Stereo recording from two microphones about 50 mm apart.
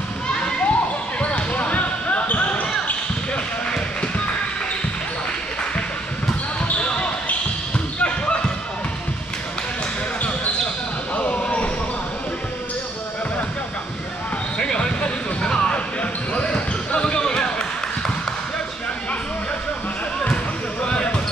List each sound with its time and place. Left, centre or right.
0.3 s children playing: centre
1.2 s basketball bounce: left
6.6 s basketball bounce: left
11.1 s basketball bounce: left
14.6 s basketball bounce: centre
20.8 s basketball bounce: left